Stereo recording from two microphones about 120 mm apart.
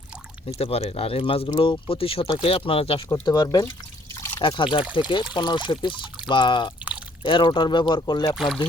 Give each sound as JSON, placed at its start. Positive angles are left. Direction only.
{"t": 0.6, "sound": "speech", "side_deg": 55}
{"t": 3.1, "sound": "speech", "side_deg": 35}
{"t": 3.7, "sound": "drip", "side_deg": 25}
{"t": 4.4, "sound": "speech", "side_deg": 45}